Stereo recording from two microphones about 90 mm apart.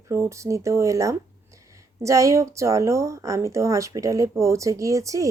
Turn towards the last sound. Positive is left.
turn(degrees=-35)  # may be behind; listen again after turning